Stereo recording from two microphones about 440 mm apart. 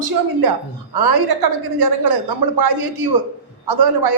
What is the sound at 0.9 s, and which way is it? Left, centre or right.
Speech, right.